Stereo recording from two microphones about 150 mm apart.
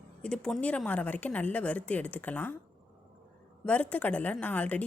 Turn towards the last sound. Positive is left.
turn(degrees=10)  # may be behind; listen again after turning